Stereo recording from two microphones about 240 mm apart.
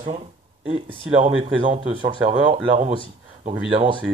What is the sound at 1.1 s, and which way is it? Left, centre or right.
Speech, right.